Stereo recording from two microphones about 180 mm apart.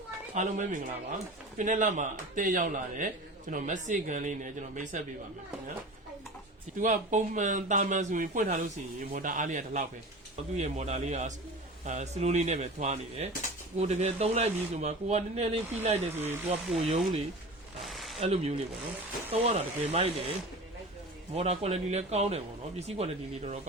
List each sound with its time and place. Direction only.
0.3 s speech: 45° right (ahead or behind)
6.7 s speech: 45° right (ahead or behind)
17.8 s a sound: centre (ahead or behind)
18.2 s speech: 35° right (ahead or behind)
21.3 s speech: 35° right (ahead or behind)